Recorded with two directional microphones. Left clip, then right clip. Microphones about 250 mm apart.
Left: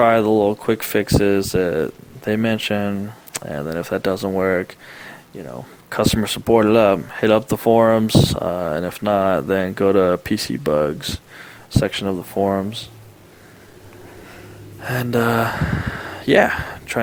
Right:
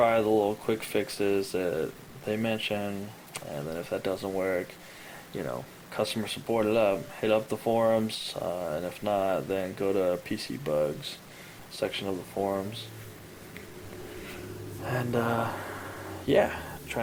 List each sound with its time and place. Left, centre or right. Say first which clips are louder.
0.0 s speech: left 9 dB; left
5.9 s speech: left 11 dB; left
14.8 s speech: left 10 dB; left